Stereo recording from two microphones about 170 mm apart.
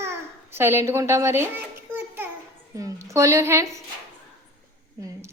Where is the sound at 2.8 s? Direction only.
20° right (ahead or behind).